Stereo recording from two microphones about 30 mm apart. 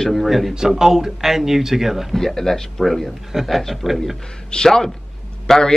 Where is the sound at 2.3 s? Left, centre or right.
Centre.